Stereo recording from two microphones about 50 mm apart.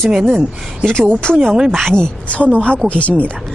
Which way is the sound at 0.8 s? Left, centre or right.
Centre.